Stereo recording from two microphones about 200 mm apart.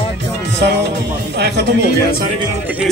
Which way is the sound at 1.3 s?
55° right (ahead or behind).